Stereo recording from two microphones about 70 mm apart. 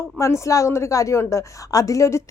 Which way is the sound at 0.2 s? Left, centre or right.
Left.